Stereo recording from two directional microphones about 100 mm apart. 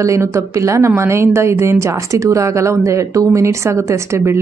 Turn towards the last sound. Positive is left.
turn(degrees=-30)  # may be behind; listen again after turning